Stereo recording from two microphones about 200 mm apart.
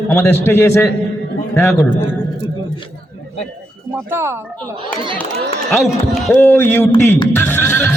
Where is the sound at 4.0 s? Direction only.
10° right (ahead or behind).